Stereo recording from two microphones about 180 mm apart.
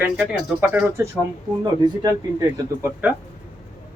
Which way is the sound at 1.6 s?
20° right (ahead or behind).